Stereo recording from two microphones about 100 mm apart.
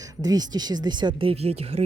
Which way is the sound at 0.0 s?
40° right (ahead or behind).